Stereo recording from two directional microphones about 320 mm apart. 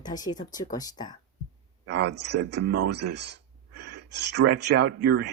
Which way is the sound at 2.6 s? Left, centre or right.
Right.